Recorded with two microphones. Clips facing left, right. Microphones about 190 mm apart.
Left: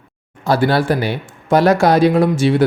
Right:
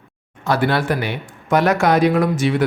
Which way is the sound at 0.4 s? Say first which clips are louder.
Left 3 dB; 35° left (ahead or behind).